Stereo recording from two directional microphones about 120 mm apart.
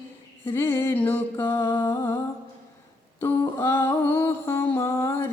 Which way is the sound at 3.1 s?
20° left (ahead or behind).